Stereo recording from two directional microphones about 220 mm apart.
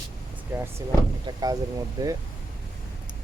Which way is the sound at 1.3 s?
20° right (ahead or behind).